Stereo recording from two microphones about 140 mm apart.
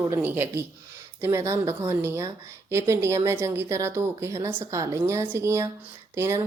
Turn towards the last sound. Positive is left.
turn(degrees=-20)  # may be behind; listen again after turning